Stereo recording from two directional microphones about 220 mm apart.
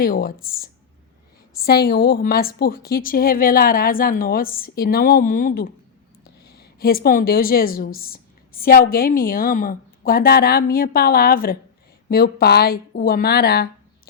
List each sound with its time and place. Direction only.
0.0 s a woman's voice: 40° left (ahead or behind)